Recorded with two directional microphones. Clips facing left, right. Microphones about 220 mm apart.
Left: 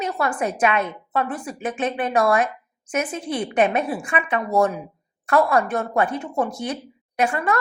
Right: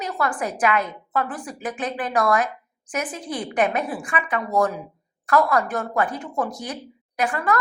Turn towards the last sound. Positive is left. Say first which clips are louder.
# left 1 dB
turn(degrees=25)  # may be behind; listen again after turning